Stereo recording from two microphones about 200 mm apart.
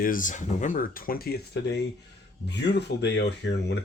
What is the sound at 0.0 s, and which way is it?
Speech, 40° left (ahead or behind).